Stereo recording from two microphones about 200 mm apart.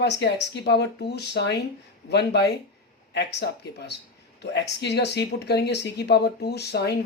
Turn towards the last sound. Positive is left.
turn(degrees=55)  # may be behind; listen again after turning